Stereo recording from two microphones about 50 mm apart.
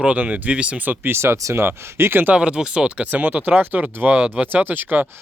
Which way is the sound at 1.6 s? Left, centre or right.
Right.